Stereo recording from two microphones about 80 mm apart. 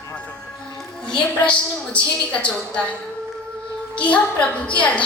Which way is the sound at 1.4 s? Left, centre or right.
Centre.